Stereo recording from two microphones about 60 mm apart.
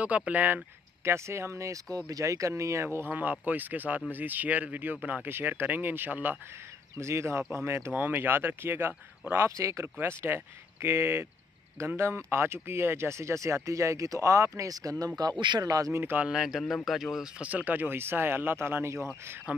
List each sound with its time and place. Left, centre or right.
0.0 s speech: right
1.0 s speech: right
2.0 s speech: right
3.1 s speech: right
7.0 s speech: right
7.9 s speech: right
9.6 s speech: right
9.9 s speech: right
15.9 s speech: right
16.2 s speech: centre
16.6 s speech: centre
17.4 s speech: right